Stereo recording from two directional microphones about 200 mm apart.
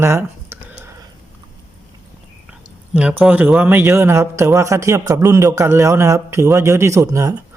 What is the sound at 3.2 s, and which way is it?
A man's voice, 5° right (ahead or behind).